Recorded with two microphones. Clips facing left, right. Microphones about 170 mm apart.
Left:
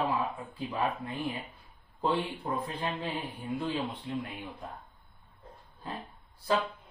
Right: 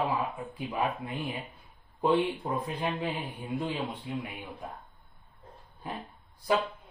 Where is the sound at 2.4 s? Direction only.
10° right (ahead or behind).